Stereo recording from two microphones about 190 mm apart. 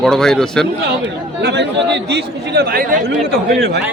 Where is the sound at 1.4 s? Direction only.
65° right (ahead or behind).